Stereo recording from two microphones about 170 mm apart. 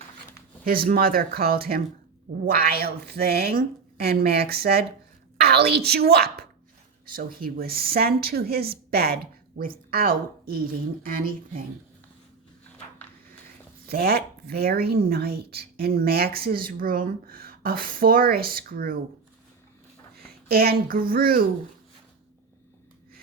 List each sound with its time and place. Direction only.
0.9 s speech: 60° right (ahead or behind)
7.2 s speech: 60° right (ahead or behind)
13.8 s speech: 60° right (ahead or behind)
20.2 s a child's voice: 65° right (ahead or behind)